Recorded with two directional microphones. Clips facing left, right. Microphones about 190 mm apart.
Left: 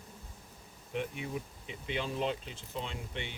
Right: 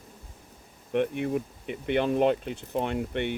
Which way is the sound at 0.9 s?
60° right (ahead or behind).